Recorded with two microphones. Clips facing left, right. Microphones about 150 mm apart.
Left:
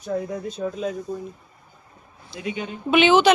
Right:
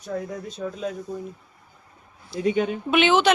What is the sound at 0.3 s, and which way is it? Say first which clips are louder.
Speech: left 4 dB; centre (ahead or behind).